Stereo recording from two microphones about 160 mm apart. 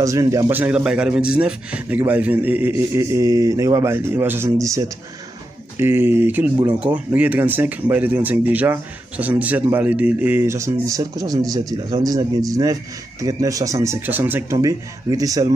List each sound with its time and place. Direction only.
0.0 s speech: 20° right (ahead or behind)